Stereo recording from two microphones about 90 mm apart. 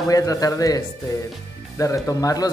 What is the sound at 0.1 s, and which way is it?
Speech, 40° left (ahead or behind).